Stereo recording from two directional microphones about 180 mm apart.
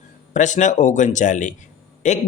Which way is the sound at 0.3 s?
40° left (ahead or behind).